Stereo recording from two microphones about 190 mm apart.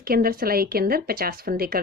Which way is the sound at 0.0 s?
50° right (ahead or behind).